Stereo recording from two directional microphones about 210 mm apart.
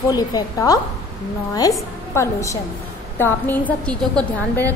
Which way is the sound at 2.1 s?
15° left (ahead or behind).